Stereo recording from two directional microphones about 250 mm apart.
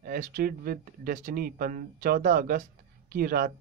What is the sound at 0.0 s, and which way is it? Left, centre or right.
Speech, right.